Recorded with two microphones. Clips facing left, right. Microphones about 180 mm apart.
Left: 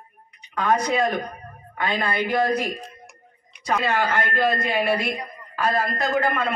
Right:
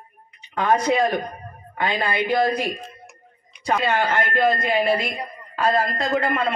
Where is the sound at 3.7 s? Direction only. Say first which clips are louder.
Right 1 dB; 25° right (ahead or behind).